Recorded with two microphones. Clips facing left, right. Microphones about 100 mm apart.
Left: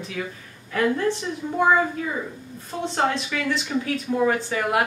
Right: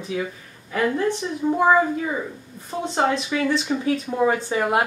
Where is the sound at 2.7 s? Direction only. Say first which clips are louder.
Right 2 dB; 15° right (ahead or behind).